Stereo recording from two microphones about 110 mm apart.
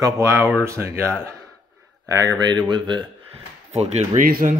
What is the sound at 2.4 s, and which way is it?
Speech, 40° right (ahead or behind).